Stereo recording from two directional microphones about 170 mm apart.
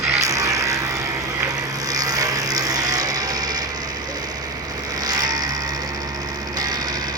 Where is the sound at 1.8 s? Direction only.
20° right (ahead or behind).